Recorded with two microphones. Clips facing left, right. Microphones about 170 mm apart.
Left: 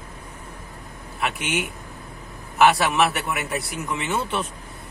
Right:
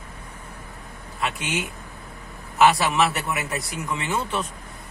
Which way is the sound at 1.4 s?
60° left (ahead or behind).